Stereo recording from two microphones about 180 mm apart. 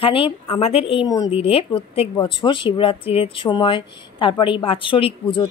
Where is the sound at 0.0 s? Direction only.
30° left (ahead or behind).